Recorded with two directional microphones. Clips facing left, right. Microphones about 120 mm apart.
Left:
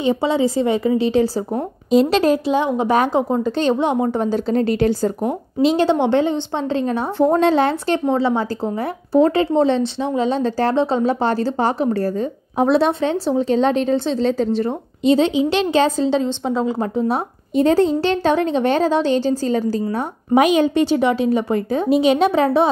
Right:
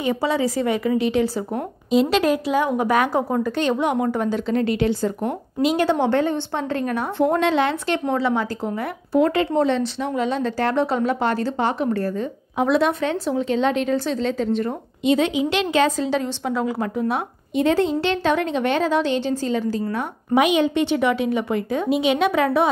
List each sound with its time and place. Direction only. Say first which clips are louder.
0.0 s a woman's voice: left 4 dB; 25° left (ahead or behind)
3.5 s speech: left 3 dB; 30° left (ahead or behind)
5.6 s a woman's voice: left 3 dB; 30° left (ahead or behind)